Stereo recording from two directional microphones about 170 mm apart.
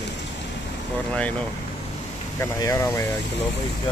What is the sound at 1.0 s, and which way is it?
Speech, 5° left (ahead or behind).